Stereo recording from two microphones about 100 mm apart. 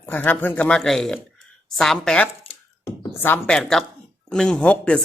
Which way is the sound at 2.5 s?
70° left (ahead or behind).